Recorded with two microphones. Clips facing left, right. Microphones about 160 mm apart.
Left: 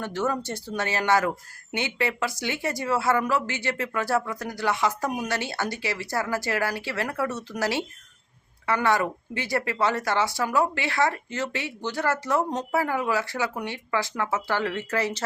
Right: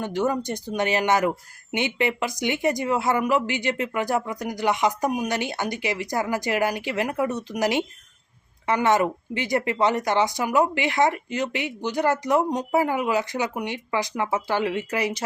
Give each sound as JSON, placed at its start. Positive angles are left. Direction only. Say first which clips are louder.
{"t": 0.0, "sound": "speech", "louder": "right 3 dB", "side_deg": -15}